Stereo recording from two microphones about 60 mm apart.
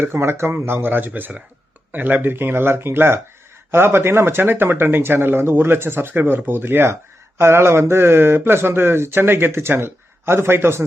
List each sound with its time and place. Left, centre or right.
0.0 s speech: right